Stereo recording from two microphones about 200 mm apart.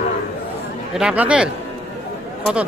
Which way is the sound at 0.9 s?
5° right (ahead or behind).